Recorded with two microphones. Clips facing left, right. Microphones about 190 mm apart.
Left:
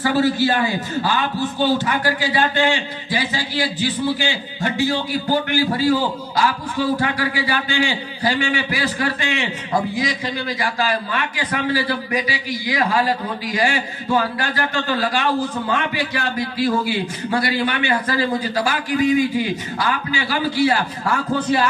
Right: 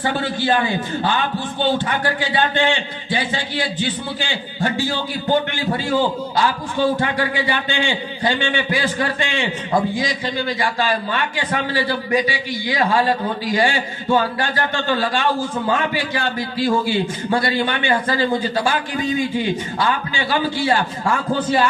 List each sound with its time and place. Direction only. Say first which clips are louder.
0.0 s a man's voice: left 4 dB; 25° right (ahead or behind)